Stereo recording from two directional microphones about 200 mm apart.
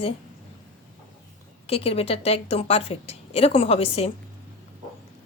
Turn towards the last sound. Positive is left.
turn(degrees=30)  # may be behind; listen again after turning